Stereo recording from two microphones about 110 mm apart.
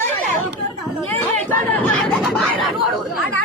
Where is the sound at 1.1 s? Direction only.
15° left (ahead or behind).